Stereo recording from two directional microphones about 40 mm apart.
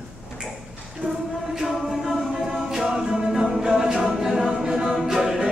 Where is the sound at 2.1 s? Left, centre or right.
Centre.